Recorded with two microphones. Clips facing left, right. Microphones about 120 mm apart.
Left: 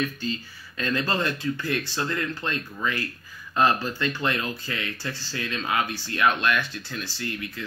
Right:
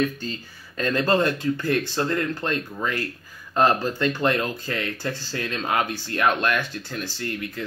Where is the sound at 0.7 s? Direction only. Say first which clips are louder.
Right 5 dB; 45° right (ahead or behind).